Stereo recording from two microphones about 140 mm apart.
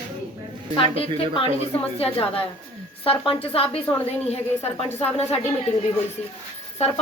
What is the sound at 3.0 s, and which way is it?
Speech, 40° left (ahead or behind).